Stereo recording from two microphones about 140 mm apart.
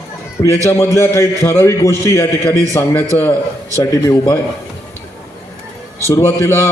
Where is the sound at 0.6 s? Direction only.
20° left (ahead or behind).